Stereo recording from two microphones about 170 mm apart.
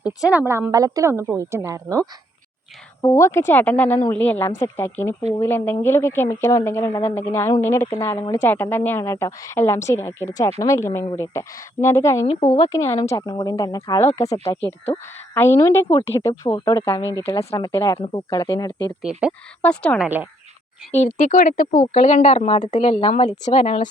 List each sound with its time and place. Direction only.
0.3 s a woman's voice: 10° right (ahead or behind)
3.0 s a woman's voice: 15° left (ahead or behind)
12.2 s a woman's voice: 30° left (ahead or behind); by 17.3 s 15° left (ahead or behind)
17.3 s speech: 30° left (ahead or behind)
17.7 s speech: 20° left (ahead or behind)
19.6 s a woman's voice: 5° left (ahead or behind)
20.0 s a woman's voice: 10° right (ahead or behind)
20.9 s a woman's voice: 45° left (ahead or behind)